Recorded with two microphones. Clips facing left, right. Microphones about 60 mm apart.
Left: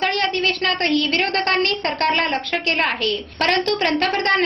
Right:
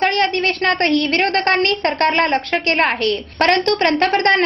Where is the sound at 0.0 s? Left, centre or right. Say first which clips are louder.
Right 4 dB; right.